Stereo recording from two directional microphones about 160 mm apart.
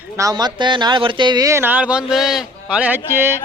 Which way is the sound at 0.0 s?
20° right (ahead or behind).